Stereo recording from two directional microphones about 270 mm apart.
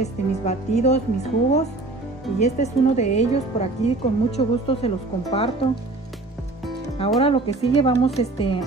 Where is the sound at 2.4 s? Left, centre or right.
Left.